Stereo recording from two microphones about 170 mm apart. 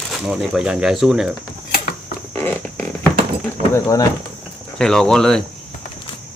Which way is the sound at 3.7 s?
20° left (ahead or behind).